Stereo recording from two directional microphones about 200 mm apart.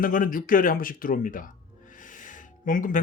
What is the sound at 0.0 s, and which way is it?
Speech, 45° left (ahead or behind).